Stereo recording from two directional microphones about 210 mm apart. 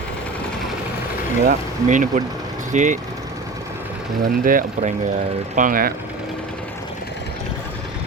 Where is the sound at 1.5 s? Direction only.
35° right (ahead or behind).